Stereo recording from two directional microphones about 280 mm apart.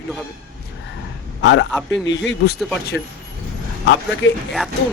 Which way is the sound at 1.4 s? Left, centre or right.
Left.